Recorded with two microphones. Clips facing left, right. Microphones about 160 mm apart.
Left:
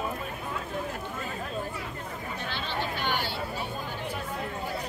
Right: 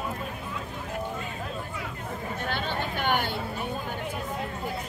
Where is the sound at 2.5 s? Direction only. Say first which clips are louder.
Right 2 dB; 50° right (ahead or behind).